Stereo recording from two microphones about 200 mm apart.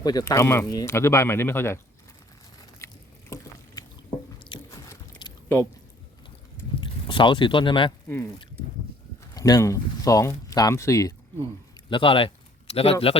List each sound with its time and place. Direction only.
0.0 s speech: 20° left (ahead or behind)
2.8 s a sound: 15° left (ahead or behind)
4.4 s biting: 20° left (ahead or behind)
5.2 s a sound: 20° left (ahead or behind)
6.8 s speech: 25° left (ahead or behind)
8.0 s speech: 10° left (ahead or behind)
9.3 s speech: 15° left (ahead or behind)